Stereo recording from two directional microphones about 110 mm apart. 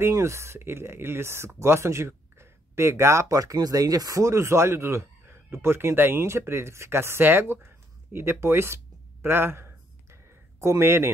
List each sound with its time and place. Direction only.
0.0 s speech: 25° right (ahead or behind)